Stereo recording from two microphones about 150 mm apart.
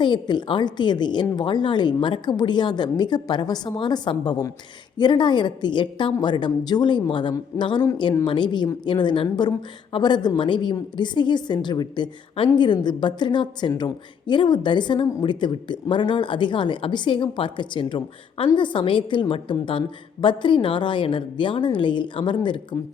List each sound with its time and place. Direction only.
0.0 s a woman's voice: 30° left (ahead or behind)